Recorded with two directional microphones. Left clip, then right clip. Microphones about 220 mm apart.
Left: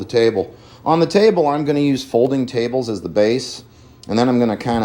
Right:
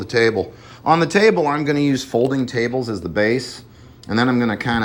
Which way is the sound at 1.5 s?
20° left (ahead or behind).